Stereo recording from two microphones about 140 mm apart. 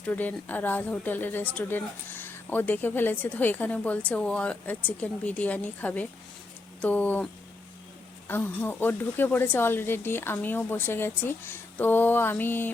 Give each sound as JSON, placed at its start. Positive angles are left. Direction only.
{"t": 0.0, "sound": "speech", "side_deg": 10}
{"t": 8.3, "sound": "speech", "side_deg": 15}